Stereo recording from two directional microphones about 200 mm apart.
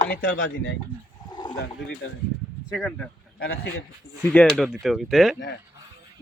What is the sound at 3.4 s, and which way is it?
Speech, 50° left (ahead or behind).